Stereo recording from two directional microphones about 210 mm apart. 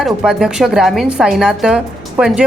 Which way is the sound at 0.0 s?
5° right (ahead or behind).